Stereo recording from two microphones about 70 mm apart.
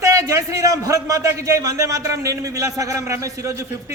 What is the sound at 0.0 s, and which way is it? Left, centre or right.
A man's voice, right.